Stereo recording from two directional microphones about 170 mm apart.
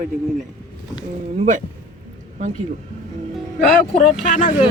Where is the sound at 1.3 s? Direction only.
45° right (ahead or behind).